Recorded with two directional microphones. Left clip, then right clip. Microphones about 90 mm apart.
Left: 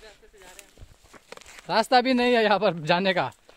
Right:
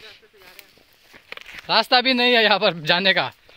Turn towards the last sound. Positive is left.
turn(degrees=20)  # may be behind; listen again after turning